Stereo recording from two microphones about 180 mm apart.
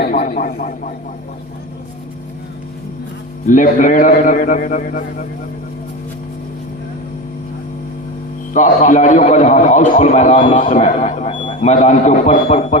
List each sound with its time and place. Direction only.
0.3 s a man's voice: 50° left (ahead or behind)
3.4 s a man's voice: 45° left (ahead or behind)
8.5 s a man's voice: 45° left (ahead or behind)